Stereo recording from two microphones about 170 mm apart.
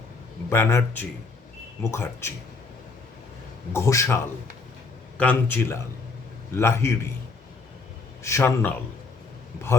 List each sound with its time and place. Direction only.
0.5 s a man's voice: 15° left (ahead or behind)
3.7 s a man's voice: 15° left (ahead or behind)
8.2 s a man's voice: 15° left (ahead or behind)